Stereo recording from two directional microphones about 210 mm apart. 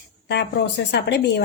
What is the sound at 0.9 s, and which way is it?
Speech, 55° left (ahead or behind).